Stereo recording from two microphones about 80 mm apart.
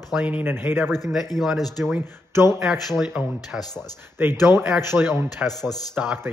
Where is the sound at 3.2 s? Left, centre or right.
Centre.